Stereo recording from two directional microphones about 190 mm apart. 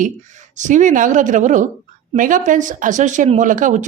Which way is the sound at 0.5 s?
40° right (ahead or behind).